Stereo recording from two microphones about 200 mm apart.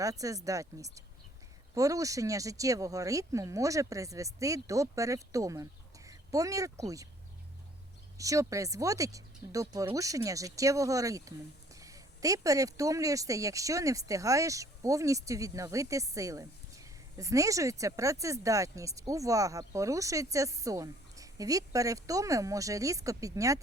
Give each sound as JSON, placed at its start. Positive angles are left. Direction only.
{"t": 0.0, "sound": "speech", "side_deg": -15}
{"t": 8.2, "sound": "speech", "side_deg": -15}